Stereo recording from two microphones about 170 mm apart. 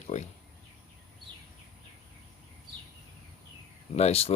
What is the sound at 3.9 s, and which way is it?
Speech, 40° left (ahead or behind).